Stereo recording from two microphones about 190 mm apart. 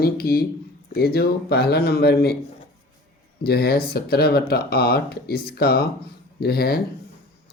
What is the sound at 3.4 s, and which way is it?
Speech, 55° left (ahead or behind).